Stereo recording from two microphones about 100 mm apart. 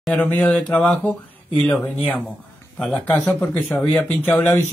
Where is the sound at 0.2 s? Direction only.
15° left (ahead or behind).